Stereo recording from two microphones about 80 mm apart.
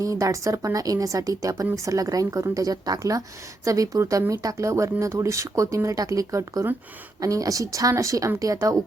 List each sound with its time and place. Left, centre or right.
0.0 s a woman's voice: right